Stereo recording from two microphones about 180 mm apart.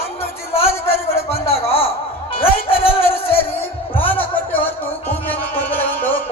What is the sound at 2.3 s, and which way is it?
Music, 30° left (ahead or behind).